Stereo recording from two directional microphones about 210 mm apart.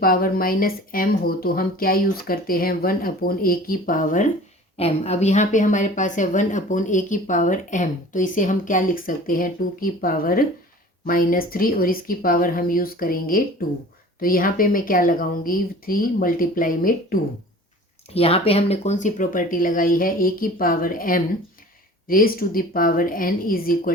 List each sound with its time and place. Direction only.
0.0 s a woman's voice: 45° left (ahead or behind)
18.1 s a woman's voice: 25° left (ahead or behind); by 23.9 s 45° left (ahead or behind)